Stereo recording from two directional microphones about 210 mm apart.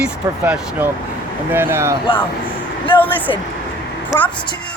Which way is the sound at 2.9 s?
25° left (ahead or behind).